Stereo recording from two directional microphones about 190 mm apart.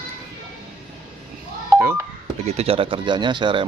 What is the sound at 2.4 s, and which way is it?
Speech, 30° right (ahead or behind).